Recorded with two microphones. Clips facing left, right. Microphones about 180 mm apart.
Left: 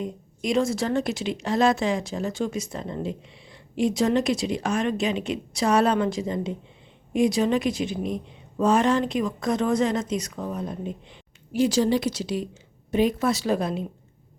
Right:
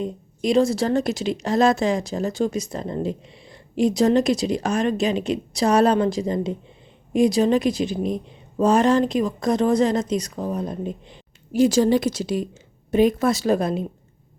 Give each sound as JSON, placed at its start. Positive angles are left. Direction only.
{"t": 0.0, "sound": "a woman's voice", "side_deg": -35}